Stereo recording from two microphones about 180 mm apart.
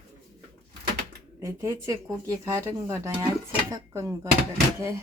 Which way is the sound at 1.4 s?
15° right (ahead or behind).